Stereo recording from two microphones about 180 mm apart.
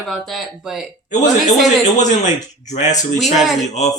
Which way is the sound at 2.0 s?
40° left (ahead or behind).